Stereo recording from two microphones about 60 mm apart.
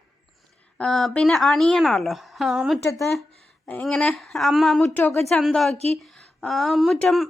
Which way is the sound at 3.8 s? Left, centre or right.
Centre.